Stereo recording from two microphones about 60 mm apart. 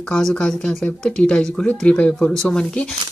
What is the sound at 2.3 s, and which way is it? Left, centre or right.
Speech, centre.